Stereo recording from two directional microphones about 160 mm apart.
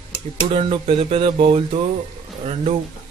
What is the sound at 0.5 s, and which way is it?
Speech, 35° right (ahead or behind).